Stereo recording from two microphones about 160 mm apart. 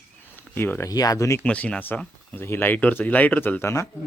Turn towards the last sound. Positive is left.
turn(degrees=15)  # may be behind; listen again after turning